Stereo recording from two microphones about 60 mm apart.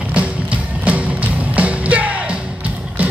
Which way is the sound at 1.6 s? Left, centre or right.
Right.